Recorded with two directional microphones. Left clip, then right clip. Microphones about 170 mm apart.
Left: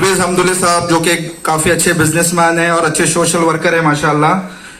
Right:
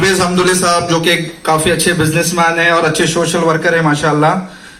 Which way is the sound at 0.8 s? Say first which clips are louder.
Even; 20° right (ahead or behind).